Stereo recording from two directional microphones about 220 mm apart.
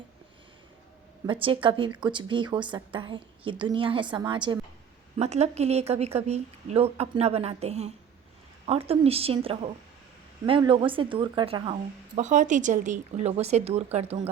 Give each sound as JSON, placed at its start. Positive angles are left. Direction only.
{"t": 1.3, "sound": "a woman's voice", "side_deg": -25}